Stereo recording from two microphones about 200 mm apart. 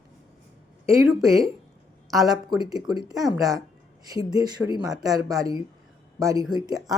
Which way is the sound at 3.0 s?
Centre (ahead or behind).